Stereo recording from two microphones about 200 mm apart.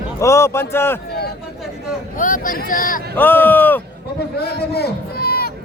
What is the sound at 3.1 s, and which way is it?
Speech, 10° left (ahead or behind).